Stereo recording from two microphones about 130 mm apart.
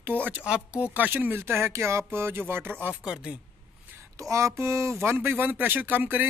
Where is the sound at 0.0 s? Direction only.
15° right (ahead or behind).